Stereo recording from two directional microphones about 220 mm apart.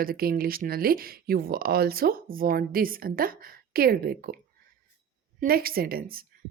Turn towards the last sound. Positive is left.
turn(degrees=-40)  # may be behind; listen again after turning